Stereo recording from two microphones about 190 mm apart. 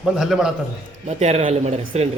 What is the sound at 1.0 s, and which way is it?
Speech, 35° right (ahead or behind).